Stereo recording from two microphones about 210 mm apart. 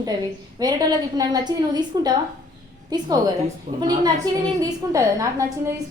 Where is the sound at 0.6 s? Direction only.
20° right (ahead or behind).